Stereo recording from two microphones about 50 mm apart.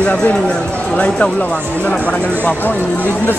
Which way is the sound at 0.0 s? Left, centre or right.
Left.